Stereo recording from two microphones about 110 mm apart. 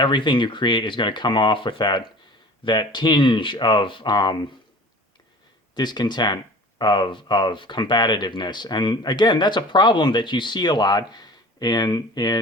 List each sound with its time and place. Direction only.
0.0 s speech: 45° left (ahead or behind)
5.7 s speech: 40° left (ahead or behind)